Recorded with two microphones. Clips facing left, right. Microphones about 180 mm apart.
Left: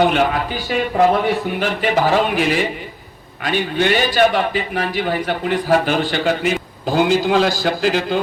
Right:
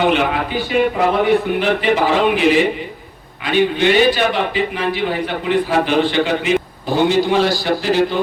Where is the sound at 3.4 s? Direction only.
45° left (ahead or behind).